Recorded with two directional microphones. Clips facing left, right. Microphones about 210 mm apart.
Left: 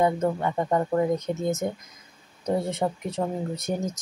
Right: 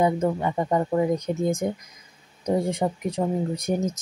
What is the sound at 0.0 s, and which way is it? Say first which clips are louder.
Speech: right 1 dB; 15° right (ahead or behind).